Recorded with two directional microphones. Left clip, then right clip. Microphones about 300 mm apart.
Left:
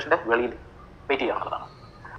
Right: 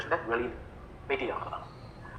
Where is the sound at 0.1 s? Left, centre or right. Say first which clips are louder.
Left 8 dB; left.